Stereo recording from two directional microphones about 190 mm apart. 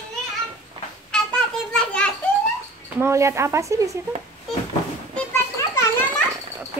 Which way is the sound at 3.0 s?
15° right (ahead or behind).